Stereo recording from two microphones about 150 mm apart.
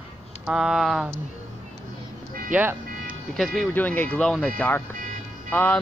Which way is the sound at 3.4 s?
Centre (ahead or behind).